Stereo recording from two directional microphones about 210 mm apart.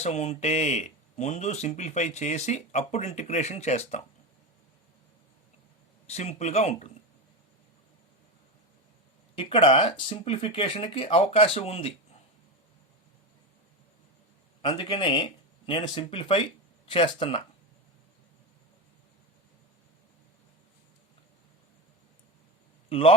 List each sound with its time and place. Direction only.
0.0 s speech: 35° left (ahead or behind)
6.1 s speech: 30° left (ahead or behind)
9.3 s speech: 25° left (ahead or behind)
14.7 s speech: 20° left (ahead or behind)
22.9 s a man's voice: 25° left (ahead or behind)